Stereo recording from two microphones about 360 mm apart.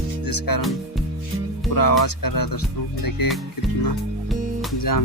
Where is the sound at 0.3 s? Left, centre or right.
Left.